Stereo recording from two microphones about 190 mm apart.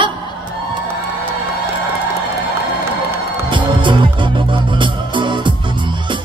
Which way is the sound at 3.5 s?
25° right (ahead or behind).